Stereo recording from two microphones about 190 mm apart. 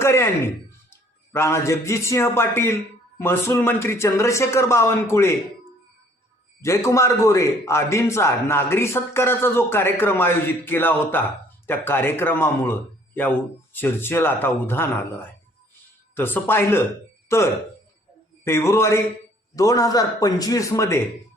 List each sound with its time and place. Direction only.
0.0 s a man's voice: 15° left (ahead or behind)
6.6 s a man's voice: 15° left (ahead or behind)
13.7 s a man's voice: 10° left (ahead or behind)
16.1 s a man's voice: 10° left (ahead or behind)